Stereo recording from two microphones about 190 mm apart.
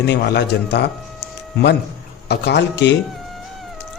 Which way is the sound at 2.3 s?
65° left (ahead or behind).